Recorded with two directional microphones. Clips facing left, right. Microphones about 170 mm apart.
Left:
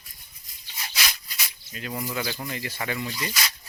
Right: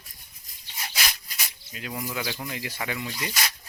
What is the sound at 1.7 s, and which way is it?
Speech, 5° right (ahead or behind).